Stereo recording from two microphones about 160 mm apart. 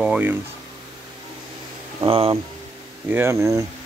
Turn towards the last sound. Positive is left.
turn(degrees=-20)  # may be behind; listen again after turning